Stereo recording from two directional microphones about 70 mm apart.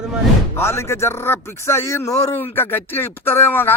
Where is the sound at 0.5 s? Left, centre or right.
Left.